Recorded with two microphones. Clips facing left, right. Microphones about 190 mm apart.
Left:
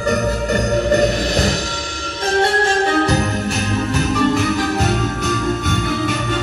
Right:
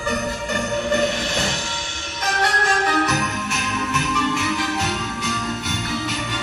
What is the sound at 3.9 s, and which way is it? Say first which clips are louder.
Jingle bell: left 7 dB; 35° left (ahead or behind).